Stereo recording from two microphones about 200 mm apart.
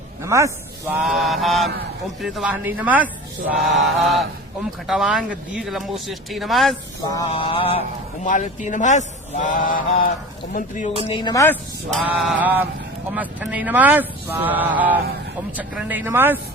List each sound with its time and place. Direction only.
0.2 s a man's voice: 15° right (ahead or behind)
1.0 s speech: centre (ahead or behind)
7.3 s male singing: 25° left (ahead or behind)
8.2 s speech: 40° left (ahead or behind)
11.1 s male singing: 20° left (ahead or behind)
11.9 s speech: centre (ahead or behind)